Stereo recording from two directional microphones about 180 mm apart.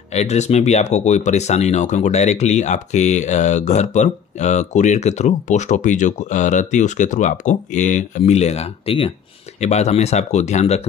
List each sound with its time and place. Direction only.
0.1 s speech: 40° left (ahead or behind)